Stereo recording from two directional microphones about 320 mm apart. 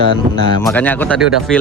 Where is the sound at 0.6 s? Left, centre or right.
Centre.